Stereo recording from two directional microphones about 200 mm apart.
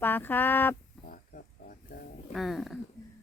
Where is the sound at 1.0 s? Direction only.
45° left (ahead or behind).